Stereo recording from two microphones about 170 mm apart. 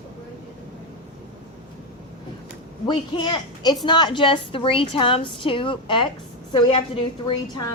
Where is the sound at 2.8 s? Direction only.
25° left (ahead or behind).